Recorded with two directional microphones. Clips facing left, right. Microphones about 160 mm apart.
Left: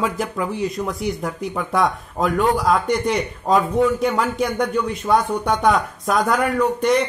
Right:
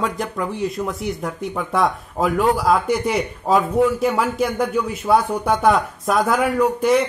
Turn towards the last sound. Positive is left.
turn(degrees=-5)  # may be behind; listen again after turning